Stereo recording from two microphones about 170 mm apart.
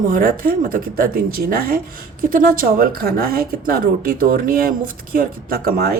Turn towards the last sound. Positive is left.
turn(degrees=-60)  # may be behind; listen again after turning